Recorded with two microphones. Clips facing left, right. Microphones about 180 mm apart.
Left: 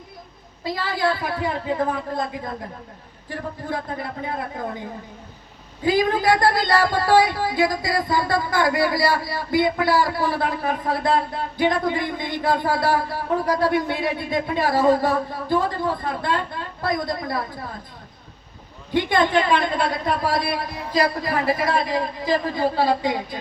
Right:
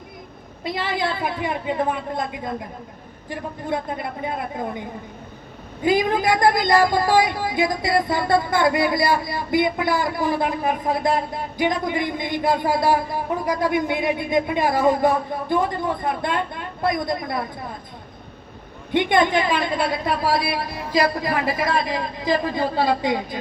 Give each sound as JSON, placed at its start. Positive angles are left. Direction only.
{"t": 0.6, "sound": "a woman's voice", "side_deg": -20}
{"t": 5.8, "sound": "speech", "side_deg": -20}
{"t": 18.9, "sound": "a woman's voice", "side_deg": -20}